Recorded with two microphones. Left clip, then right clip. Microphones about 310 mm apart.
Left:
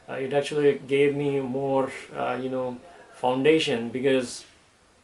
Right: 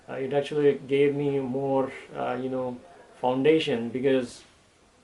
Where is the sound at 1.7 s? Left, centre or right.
Centre.